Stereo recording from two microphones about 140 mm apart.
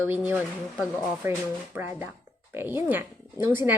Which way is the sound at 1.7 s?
15° right (ahead or behind).